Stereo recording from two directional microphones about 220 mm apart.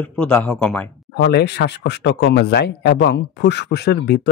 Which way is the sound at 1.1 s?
50° left (ahead or behind).